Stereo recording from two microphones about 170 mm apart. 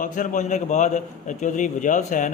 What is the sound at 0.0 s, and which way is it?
A man's voice, 50° left (ahead or behind).